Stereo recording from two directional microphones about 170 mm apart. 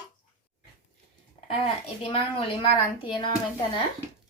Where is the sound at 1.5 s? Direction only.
35° left (ahead or behind).